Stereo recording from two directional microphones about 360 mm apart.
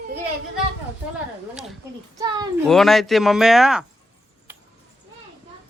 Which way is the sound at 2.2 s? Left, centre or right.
Centre.